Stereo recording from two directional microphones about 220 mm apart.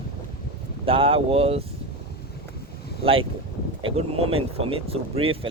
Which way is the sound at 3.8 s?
25° right (ahead or behind).